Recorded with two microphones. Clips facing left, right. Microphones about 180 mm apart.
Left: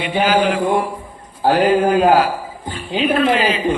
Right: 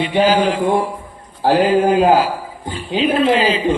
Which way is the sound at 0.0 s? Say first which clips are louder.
Right 3 dB; 35° right (ahead or behind).